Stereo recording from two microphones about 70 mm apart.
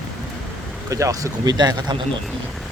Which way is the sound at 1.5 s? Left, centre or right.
Right.